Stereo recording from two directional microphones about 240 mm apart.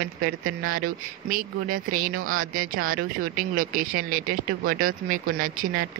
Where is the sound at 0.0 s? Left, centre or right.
Right.